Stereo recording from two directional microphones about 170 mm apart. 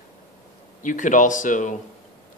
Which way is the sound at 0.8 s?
50° left (ahead or behind).